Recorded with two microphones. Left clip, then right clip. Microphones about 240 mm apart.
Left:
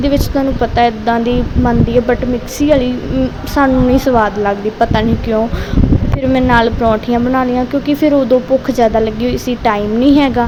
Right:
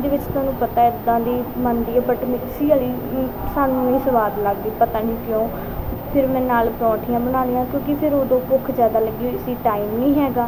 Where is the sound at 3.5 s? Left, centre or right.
Left.